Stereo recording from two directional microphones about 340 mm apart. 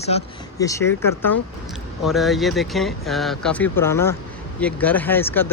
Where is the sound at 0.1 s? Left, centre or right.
Centre.